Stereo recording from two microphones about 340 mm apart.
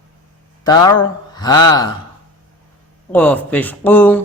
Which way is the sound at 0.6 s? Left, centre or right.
Centre.